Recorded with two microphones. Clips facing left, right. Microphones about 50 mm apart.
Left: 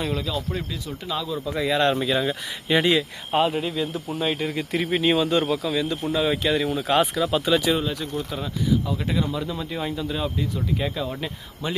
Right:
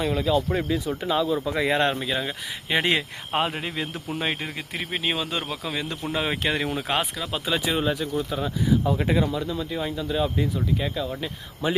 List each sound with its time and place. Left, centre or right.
0.0 s speech: centre
1.5 s speech: right
1.9 s speech: centre
2.8 s speech: right
4.5 s speech: centre
5.6 s speech: right
7.0 s speech: centre
7.3 s speech: centre
8.8 s speech: right
9.2 s speech: centre
11.6 s speech: centre